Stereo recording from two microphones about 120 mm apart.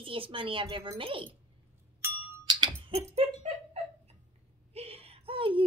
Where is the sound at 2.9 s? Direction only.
60° right (ahead or behind).